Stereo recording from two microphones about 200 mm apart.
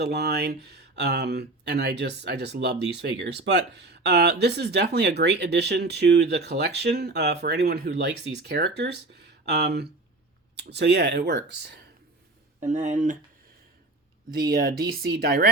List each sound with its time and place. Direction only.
0.0 s speech: 55° right (ahead or behind)
12.5 s speech: 40° right (ahead or behind)
14.5 s speech: 50° right (ahead or behind)